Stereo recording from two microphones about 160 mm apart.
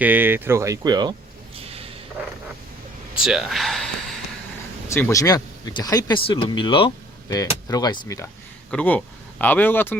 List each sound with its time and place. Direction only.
0.0 s speech: 10° right (ahead or behind)
1.5 s a sound: 35° right (ahead or behind)
3.2 s speech: centre (ahead or behind)
4.9 s speech: 15° left (ahead or behind)
8.7 s speech: 10° left (ahead or behind)